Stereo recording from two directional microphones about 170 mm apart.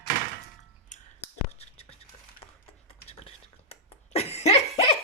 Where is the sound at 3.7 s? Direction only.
35° left (ahead or behind).